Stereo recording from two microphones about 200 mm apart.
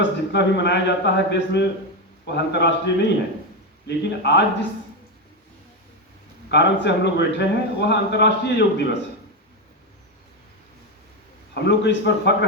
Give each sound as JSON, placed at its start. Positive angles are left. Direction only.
{"t": 0.0, "sound": "a man's voice", "side_deg": 60}
{"t": 6.5, "sound": "a man's voice", "side_deg": 60}
{"t": 11.5, "sound": "a man's voice", "side_deg": 60}